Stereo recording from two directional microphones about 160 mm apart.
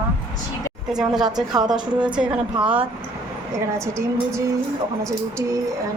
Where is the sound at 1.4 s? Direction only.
25° right (ahead or behind).